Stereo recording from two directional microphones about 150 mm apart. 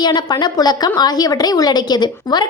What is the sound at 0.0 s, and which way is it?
A woman's voice, 30° left (ahead or behind).